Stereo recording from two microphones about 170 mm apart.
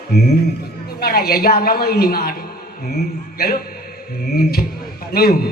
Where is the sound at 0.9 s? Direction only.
65° left (ahead or behind).